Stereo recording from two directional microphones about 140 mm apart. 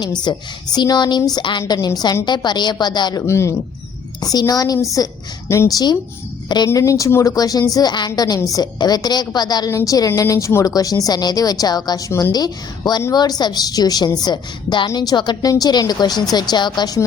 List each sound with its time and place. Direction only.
0.2 s speech: 30° left (ahead or behind)
3.2 s a woman's voice: 20° left (ahead or behind)